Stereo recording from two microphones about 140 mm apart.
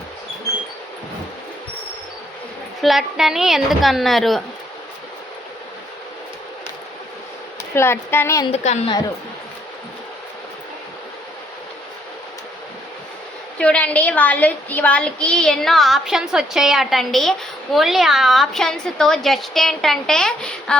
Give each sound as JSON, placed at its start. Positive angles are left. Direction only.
{"t": 2.8, "sound": "a woman's voice", "side_deg": 0}
{"t": 7.6, "sound": "a woman's voice", "side_deg": 15}
{"t": 8.5, "sound": "a woman's voice", "side_deg": 55}
{"t": 13.6, "sound": "a woman's voice", "side_deg": 10}